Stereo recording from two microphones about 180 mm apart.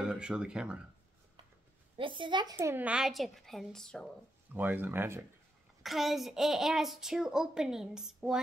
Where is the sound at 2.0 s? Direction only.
25° right (ahead or behind).